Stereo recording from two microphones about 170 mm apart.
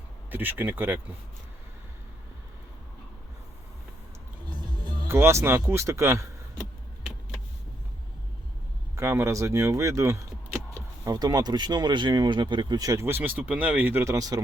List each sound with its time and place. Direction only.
0.3 s speech: 10° right (ahead or behind)
4.4 s music: 25° right (ahead or behind)
9.0 s speech: 15° right (ahead or behind)